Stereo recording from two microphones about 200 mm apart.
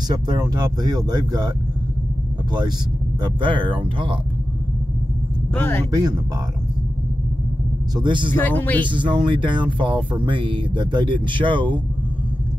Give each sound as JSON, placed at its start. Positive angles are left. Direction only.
{"t": 0.1, "sound": "speech", "side_deg": -20}
{"t": 3.2, "sound": "speech", "side_deg": -25}
{"t": 5.5, "sound": "a man's voice", "side_deg": 10}
{"t": 5.9, "sound": "speech", "side_deg": -20}
{"t": 7.9, "sound": "speech", "side_deg": -25}
{"t": 8.4, "sound": "a man's voice", "side_deg": 10}
{"t": 8.8, "sound": "speech", "side_deg": -25}